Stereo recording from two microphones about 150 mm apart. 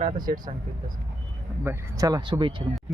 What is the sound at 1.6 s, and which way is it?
Speech, 20° right (ahead or behind).